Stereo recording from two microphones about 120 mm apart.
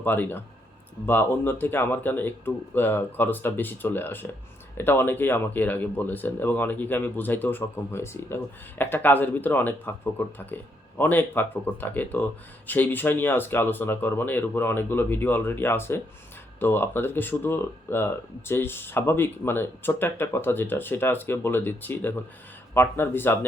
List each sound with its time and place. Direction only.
0.0 s speech: 15° left (ahead or behind)